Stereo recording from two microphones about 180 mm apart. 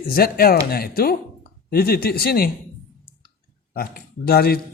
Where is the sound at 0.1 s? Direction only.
55° left (ahead or behind).